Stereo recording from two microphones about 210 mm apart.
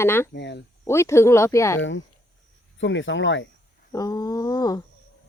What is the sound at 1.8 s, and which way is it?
Speech, 65° left (ahead or behind).